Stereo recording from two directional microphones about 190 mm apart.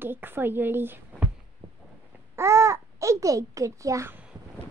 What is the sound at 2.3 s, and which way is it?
Babbling, 15° right (ahead or behind).